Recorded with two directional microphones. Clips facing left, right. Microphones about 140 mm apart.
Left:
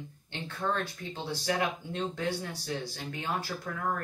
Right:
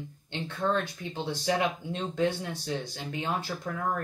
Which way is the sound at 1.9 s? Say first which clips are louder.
Right 4 dB; 20° right (ahead or behind).